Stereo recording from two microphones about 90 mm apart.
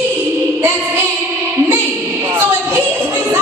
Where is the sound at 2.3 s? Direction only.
25° right (ahead or behind).